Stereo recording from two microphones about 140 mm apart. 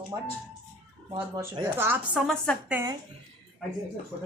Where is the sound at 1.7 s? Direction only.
15° right (ahead or behind).